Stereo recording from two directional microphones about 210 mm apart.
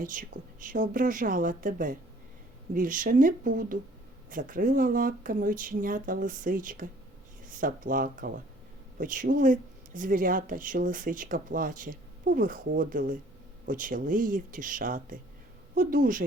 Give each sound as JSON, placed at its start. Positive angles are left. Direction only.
{"t": 0.0, "sound": "speech", "side_deg": -40}